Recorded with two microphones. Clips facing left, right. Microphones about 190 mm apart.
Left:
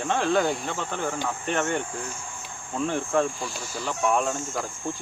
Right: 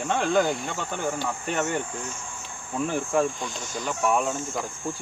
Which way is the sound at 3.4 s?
5° left (ahead or behind).